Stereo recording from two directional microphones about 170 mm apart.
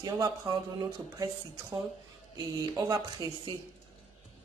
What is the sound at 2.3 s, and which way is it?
Speech, 20° right (ahead or behind).